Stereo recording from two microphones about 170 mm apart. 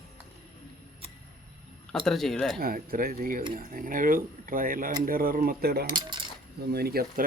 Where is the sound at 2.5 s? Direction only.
60° right (ahead or behind).